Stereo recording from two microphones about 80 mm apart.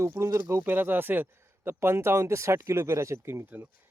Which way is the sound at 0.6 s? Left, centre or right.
Right.